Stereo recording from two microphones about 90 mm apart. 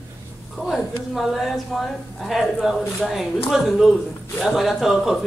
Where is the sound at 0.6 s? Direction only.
Centre (ahead or behind).